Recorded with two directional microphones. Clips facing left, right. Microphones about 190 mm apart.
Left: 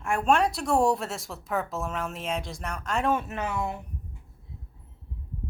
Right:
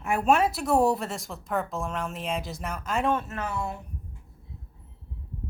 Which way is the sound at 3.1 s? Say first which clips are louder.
Left 1 dB; 15° left (ahead or behind).